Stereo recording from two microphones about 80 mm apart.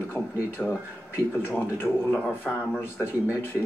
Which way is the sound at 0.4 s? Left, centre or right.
Left.